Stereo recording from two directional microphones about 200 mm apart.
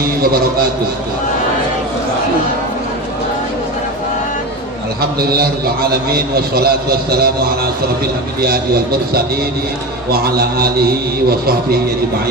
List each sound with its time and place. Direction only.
4.9 s a man's voice: 50° right (ahead or behind)